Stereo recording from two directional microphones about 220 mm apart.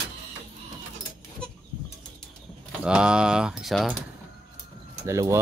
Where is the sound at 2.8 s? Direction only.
5° right (ahead or behind).